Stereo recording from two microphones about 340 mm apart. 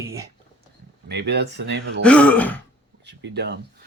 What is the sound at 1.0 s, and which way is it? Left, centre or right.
Speech, right.